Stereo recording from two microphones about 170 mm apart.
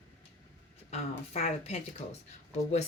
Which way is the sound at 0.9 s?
35° left (ahead or behind).